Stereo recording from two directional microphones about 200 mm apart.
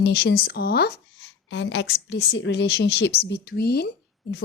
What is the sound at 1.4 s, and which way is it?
A woman's voice, 65° left (ahead or behind).